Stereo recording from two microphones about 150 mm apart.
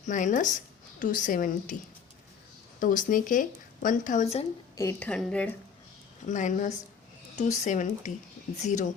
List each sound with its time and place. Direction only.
0.0 s a woman's voice: 55° left (ahead or behind)
2.8 s speech: 60° left (ahead or behind)
4.9 s a woman's voice: 10° left (ahead or behind)
6.2 s speech: 55° left (ahead or behind)